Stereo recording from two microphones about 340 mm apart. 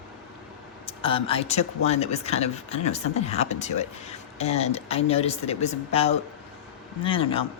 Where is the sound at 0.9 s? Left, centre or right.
Centre.